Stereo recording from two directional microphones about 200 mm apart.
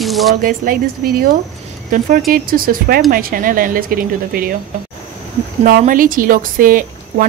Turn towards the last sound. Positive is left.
turn(degrees=-45)  # may be behind; listen again after turning